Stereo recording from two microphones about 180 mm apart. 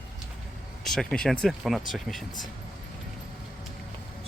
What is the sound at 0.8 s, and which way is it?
Speech, centre (ahead or behind).